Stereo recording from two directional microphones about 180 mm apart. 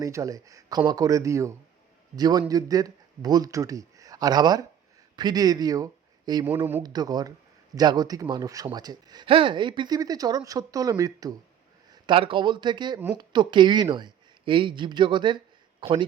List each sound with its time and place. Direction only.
0.0 s a man's voice: 15° right (ahead or behind)